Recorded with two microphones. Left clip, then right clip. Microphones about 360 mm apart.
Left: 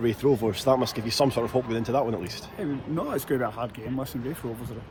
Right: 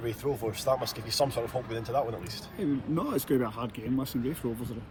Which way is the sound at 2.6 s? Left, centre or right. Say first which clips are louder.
Even; centre.